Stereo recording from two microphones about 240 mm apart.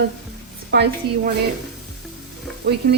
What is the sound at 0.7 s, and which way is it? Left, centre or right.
Speech, right.